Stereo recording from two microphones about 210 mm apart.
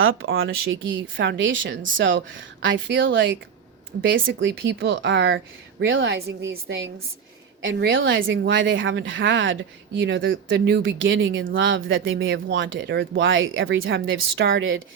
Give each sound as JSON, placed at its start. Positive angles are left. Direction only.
{"t": 0.0, "sound": "speech", "side_deg": -70}
{"t": 6.1, "sound": "speech", "side_deg": -50}